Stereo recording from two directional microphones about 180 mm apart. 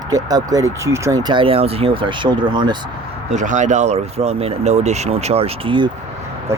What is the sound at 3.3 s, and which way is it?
Speech, 45° right (ahead or behind).